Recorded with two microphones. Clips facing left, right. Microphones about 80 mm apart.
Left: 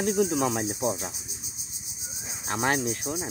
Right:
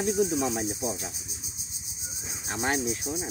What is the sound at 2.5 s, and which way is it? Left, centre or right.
Speech, left.